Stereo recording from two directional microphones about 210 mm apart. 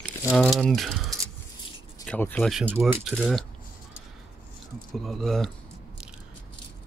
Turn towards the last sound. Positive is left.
turn(degrees=0)  # may be behind; listen again after turning